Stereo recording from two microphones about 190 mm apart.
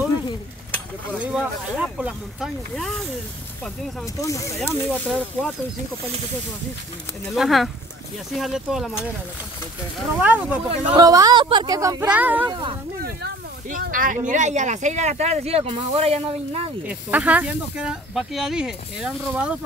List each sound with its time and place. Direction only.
1.2 s speech: 5° right (ahead or behind)
4.0 s speech: 15° left (ahead or behind)
4.6 s speech: 5° left (ahead or behind)
7.3 s speech: centre (ahead or behind)
11.0 s speech: 20° right (ahead or behind)
13.0 s speech: 50° right (ahead or behind); by 16.7 s 30° right (ahead or behind)
16.8 s speech: 10° right (ahead or behind)